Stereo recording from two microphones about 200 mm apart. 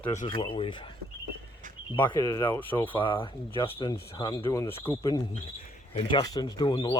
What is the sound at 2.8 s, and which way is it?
Speech, 25° left (ahead or behind).